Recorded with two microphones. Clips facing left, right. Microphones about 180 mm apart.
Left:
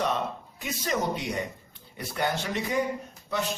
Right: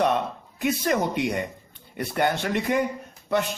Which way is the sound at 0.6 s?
60° right (ahead or behind).